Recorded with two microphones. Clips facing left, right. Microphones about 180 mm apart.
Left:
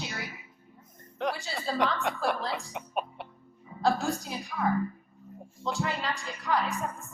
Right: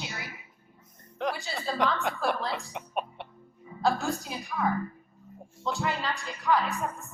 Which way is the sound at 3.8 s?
35° left (ahead or behind).